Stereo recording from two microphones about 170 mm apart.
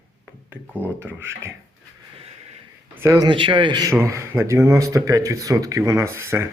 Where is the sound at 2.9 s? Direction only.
15° right (ahead or behind).